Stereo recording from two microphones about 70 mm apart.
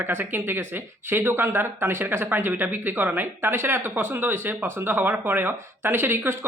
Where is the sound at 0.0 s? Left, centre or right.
Right.